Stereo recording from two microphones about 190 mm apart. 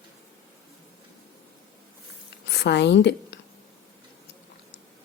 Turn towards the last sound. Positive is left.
turn(degrees=65)  # may be behind; listen again after turning